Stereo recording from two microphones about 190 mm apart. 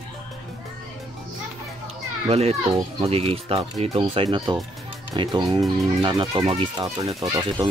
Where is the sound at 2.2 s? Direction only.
35° right (ahead or behind).